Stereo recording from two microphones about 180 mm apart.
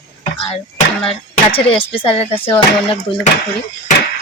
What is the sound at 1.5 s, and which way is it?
Speech, 30° left (ahead or behind).